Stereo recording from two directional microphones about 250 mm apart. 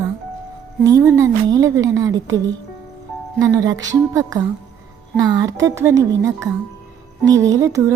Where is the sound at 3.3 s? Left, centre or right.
Centre.